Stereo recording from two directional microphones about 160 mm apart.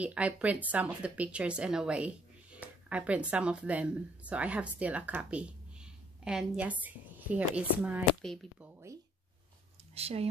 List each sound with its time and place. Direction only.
0.0 s speech: 10° right (ahead or behind)
9.9 s speech: 40° right (ahead or behind)